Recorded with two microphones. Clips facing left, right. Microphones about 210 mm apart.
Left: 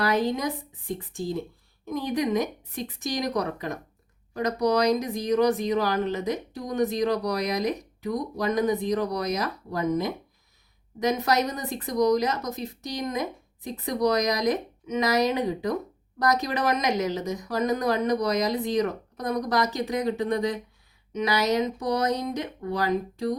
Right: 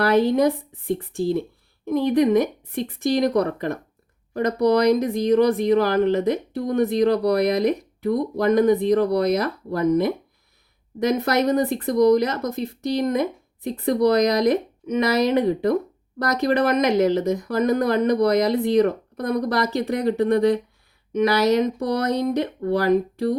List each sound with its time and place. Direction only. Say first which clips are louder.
0.0 s speech: right 7 dB; 60° right (ahead or behind)